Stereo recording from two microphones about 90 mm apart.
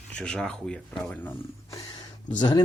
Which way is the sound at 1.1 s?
20° left (ahead or behind).